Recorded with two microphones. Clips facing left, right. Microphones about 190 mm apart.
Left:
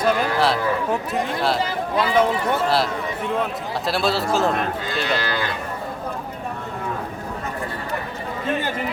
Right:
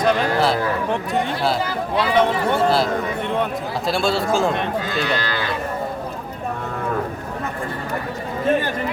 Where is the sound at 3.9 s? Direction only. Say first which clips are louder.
Right 1 dB; centre (ahead or behind).